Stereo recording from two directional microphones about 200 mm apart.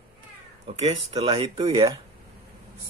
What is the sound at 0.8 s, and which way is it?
Speech, 30° right (ahead or behind).